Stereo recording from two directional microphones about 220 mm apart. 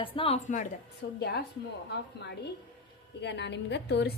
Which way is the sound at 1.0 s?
50° left (ahead or behind).